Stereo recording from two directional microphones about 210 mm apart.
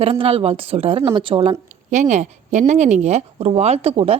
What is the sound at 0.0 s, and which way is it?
Speech, 25° right (ahead or behind).